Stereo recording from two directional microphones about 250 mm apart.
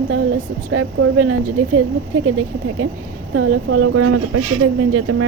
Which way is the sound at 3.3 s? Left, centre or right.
Right.